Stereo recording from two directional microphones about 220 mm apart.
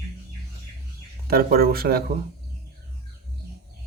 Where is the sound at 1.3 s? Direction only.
45° right (ahead or behind).